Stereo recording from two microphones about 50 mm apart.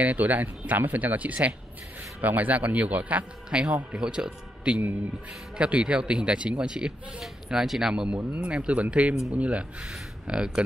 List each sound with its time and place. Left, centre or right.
0.0 s speech: right; by 7.9 s centre
8.4 s speech: right
9.8 s speech: centre